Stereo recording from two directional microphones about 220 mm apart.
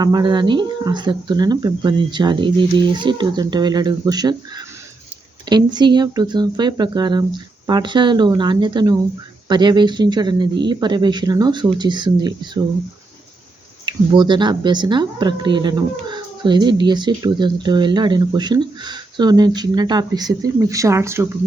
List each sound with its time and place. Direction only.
0.0 s speech: 20° right (ahead or behind)
13.8 s speech: 20° right (ahead or behind)